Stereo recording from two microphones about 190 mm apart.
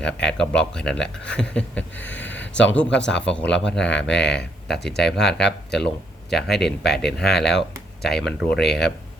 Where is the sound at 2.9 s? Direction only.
70° left (ahead or behind).